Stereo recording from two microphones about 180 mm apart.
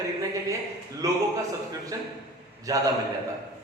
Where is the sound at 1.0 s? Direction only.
15° right (ahead or behind).